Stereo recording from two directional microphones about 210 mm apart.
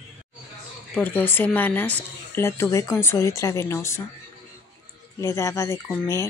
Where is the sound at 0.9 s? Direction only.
10° left (ahead or behind).